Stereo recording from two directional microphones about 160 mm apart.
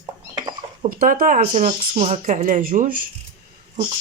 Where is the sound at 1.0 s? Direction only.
60° right (ahead or behind).